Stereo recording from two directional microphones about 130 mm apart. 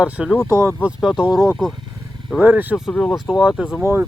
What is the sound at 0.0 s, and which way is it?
Speech, 10° right (ahead or behind).